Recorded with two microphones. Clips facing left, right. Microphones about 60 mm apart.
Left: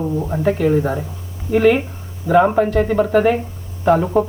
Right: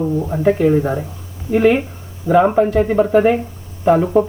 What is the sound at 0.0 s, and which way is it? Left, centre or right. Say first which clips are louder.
Speech: right 2 dB; centre.